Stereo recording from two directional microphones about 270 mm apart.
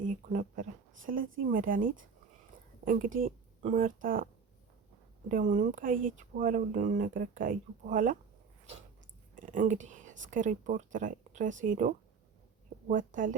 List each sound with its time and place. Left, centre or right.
0.0 s a woman's voice: right
5.3 s speech: right
9.3 s speech: right